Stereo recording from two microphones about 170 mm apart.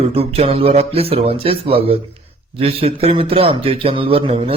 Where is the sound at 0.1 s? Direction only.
35° right (ahead or behind).